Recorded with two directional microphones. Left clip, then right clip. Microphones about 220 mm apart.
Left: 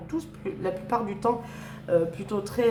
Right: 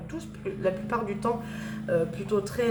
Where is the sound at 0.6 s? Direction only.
50° left (ahead or behind).